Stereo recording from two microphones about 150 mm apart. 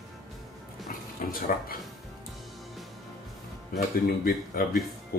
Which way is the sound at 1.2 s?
65° left (ahead or behind).